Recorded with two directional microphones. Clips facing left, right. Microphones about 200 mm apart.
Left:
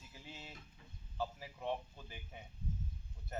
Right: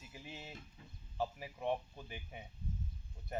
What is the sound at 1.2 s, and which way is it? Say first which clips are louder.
Speech: right 3 dB; 15° right (ahead or behind).